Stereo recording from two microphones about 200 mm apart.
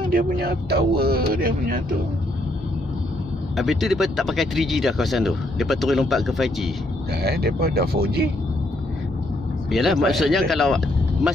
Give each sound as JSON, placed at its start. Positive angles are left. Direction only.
{"t": 0.1, "sound": "speech", "side_deg": -45}
{"t": 3.5, "sound": "speech", "side_deg": 0}
{"t": 7.1, "sound": "speech", "side_deg": -55}
{"t": 9.7, "sound": "speech", "side_deg": 0}